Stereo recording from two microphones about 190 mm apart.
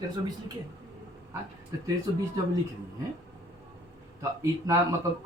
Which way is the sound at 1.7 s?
20° right (ahead or behind).